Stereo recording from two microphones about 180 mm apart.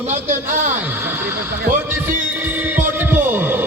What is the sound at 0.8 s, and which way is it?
Speech, 10° right (ahead or behind).